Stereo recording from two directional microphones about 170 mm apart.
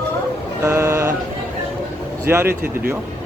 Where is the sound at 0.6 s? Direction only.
15° right (ahead or behind).